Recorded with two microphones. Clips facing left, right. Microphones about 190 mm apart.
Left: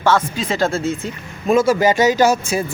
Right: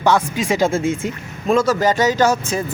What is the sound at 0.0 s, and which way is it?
Speech, 15° right (ahead or behind).